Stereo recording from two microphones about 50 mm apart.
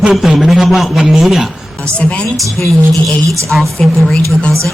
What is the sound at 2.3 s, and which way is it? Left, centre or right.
A man's voice, centre.